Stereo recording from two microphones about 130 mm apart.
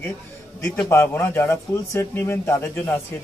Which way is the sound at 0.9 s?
15° left (ahead or behind).